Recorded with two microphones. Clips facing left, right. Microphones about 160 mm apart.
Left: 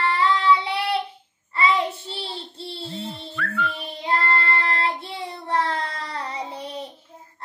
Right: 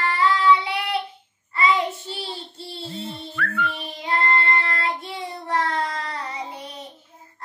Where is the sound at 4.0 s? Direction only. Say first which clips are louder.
Even; 30° left (ahead or behind).